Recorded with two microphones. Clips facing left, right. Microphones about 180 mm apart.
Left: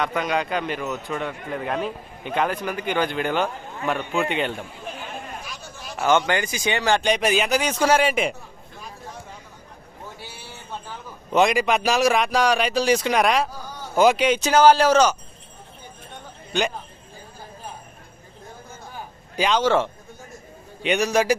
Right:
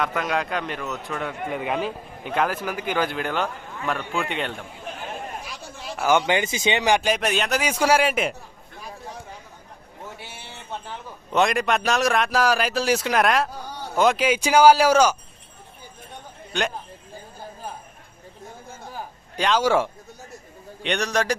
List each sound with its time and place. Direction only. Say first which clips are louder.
0.0 s speech: left 1 dB; centre (ahead or behind)
6.0 s speech: even; 10° right (ahead or behind)
7.0 s speech: left 2 dB; centre (ahead or behind)
10.2 s a sound: even; 25° right (ahead or behind)
11.3 s speech: left 2 dB; centre (ahead or behind)
16.5 s speech: left 2 dB; centre (ahead or behind)
19.4 s speech: left 1 dB; centre (ahead or behind)
20.8 s a man's voice: left 4 dB; 5° left (ahead or behind)